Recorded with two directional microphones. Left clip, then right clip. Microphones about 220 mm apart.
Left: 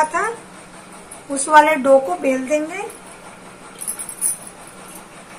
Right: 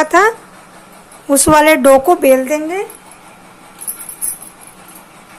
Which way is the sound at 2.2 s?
45° right (ahead or behind).